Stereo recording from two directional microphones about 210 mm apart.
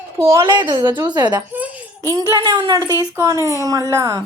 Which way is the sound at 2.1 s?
20° right (ahead or behind).